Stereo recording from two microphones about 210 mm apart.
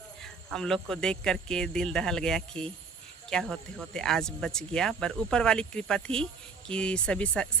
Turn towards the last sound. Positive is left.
turn(degrees=5)  # may be behind; listen again after turning